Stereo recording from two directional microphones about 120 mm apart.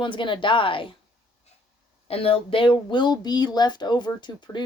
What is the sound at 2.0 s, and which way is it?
Speech, 55° left (ahead or behind).